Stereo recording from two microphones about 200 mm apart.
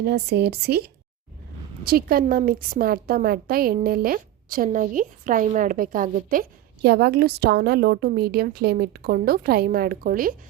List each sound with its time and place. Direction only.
0.0 s a woman's voice: 55° right (ahead or behind)